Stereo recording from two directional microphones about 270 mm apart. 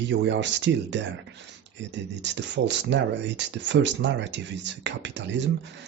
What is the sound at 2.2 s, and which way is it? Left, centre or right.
Speech, right.